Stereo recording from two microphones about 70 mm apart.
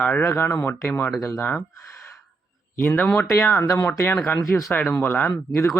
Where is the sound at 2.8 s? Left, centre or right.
Centre.